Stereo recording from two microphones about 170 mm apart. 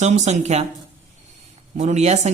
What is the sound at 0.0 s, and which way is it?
Speech, 40° right (ahead or behind).